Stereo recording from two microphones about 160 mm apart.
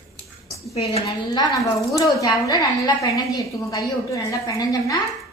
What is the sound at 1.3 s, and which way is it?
A woman's voice, 25° left (ahead or behind).